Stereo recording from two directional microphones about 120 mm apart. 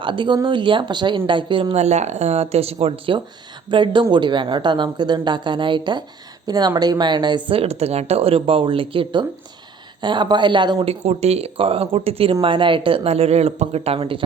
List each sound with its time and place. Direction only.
0.0 s speech: 40° right (ahead or behind)
1.7 s speech: 70° right (ahead or behind); by 10.8 s 40° right (ahead or behind)
10.8 s speech: 60° right (ahead or behind)